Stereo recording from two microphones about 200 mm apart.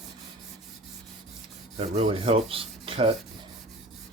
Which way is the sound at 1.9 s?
30° right (ahead or behind).